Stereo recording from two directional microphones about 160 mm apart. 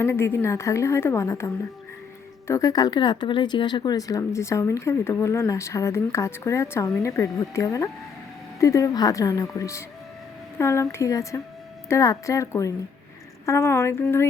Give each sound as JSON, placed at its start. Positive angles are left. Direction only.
{"t": 0.0, "sound": "a woman's voice", "side_deg": 15}
{"t": 2.5, "sound": "a woman's voice", "side_deg": 20}